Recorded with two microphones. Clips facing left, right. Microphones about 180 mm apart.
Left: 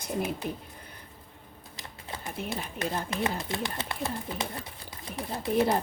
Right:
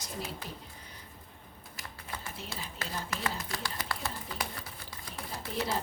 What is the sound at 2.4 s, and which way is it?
Speech, 55° left (ahead or behind).